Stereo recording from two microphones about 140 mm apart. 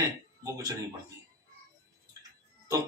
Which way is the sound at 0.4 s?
25° right (ahead or behind).